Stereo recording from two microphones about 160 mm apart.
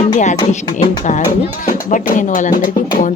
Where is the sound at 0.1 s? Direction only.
45° left (ahead or behind).